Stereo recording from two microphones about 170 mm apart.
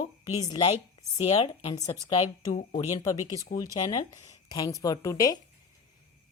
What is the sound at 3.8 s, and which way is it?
Speech, 20° left (ahead or behind).